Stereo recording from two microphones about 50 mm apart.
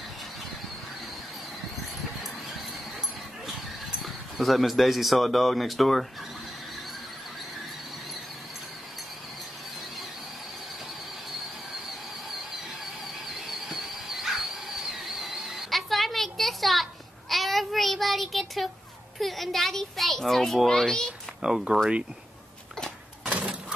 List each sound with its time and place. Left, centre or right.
4.0 s speech: centre
13.5 s dog: centre
17.3 s child singing: centre
19.1 s a sound: centre
21.5 s speech: centre
23.2 s a sound: right